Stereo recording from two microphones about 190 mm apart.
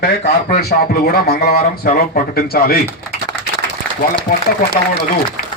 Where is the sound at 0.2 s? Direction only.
40° left (ahead or behind).